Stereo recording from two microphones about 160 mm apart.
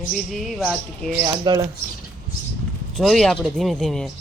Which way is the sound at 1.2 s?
25° right (ahead or behind).